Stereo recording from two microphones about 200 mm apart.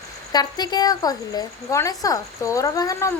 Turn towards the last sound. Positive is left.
turn(degrees=15)  # may be behind; listen again after turning